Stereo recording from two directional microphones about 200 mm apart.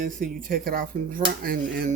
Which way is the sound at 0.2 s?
45° right (ahead or behind).